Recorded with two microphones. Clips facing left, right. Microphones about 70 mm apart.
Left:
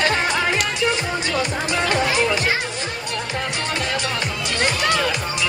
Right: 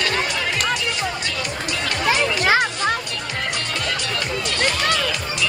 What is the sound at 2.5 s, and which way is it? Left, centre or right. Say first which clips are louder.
Music: right 6 dB; right.